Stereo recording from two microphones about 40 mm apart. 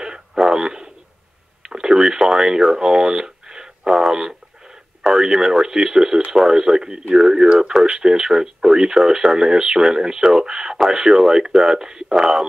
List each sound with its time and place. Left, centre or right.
0.0 s frog: centre
1.7 s speech: centre